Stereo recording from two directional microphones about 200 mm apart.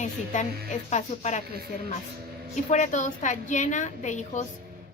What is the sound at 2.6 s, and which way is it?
A woman's voice, 40° left (ahead or behind).